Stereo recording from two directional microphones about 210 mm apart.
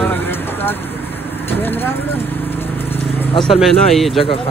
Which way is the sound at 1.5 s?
10° left (ahead or behind).